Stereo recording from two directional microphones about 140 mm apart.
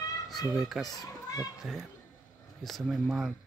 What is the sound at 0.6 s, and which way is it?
Speech, centre (ahead or behind).